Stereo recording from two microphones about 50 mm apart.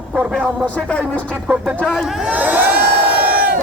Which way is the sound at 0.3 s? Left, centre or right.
Left.